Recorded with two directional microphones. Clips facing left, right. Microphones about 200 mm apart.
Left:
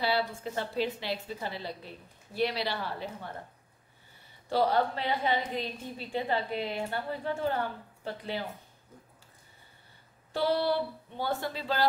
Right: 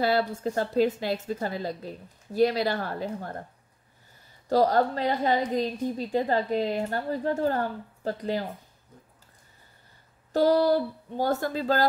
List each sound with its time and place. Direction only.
0.0 s a woman's voice: 45° right (ahead or behind)
4.5 s a woman's voice: 40° right (ahead or behind)
10.3 s a woman's voice: 40° right (ahead or behind)